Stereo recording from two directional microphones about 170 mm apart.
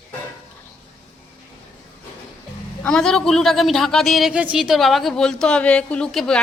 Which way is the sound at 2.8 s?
5° left (ahead or behind).